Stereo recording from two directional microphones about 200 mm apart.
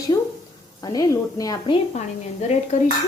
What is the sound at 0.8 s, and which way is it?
A woman's voice, 20° left (ahead or behind).